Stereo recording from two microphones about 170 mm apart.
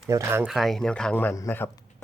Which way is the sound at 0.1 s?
15° right (ahead or behind).